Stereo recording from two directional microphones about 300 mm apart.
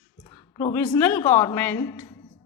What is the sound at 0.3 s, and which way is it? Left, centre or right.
A woman's voice, centre.